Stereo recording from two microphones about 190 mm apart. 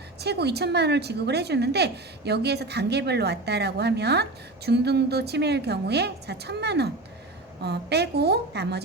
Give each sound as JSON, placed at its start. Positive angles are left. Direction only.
{"t": 0.2, "sound": "a woman's voice", "side_deg": -60}